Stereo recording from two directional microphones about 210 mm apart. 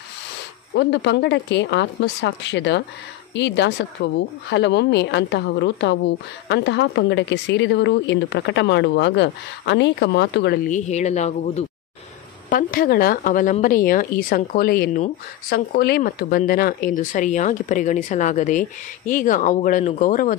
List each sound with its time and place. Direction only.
0.7 s a woman's voice: 55° left (ahead or behind); by 20.3 s 40° left (ahead or behind)